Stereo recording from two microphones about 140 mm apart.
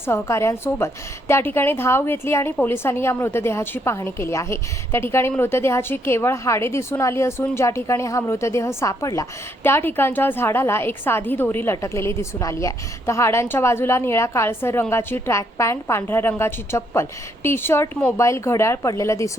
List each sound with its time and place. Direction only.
0.0 s a woman's voice: 20° left (ahead or behind)